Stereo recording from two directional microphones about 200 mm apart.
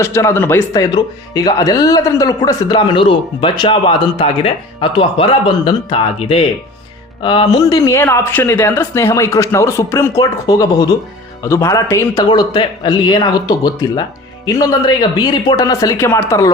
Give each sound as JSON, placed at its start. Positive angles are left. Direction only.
{"t": 0.0, "sound": "speech", "side_deg": 15}